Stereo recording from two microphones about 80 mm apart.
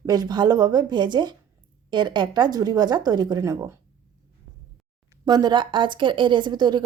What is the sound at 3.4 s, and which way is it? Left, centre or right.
Speech, right.